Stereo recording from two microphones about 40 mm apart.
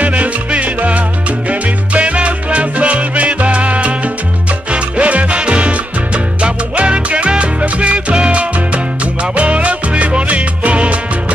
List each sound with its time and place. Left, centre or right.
0.0 s music: right